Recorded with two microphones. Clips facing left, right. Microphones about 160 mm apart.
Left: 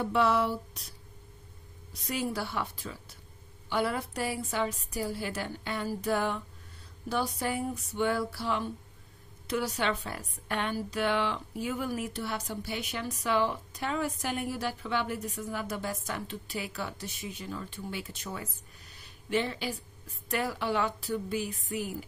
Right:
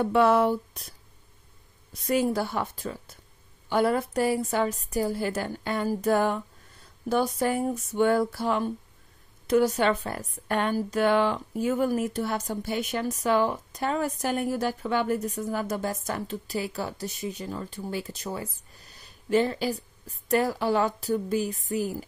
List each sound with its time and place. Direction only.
0.0 s a woman's voice: 50° right (ahead or behind)
2.0 s a woman's voice: 45° right (ahead or behind)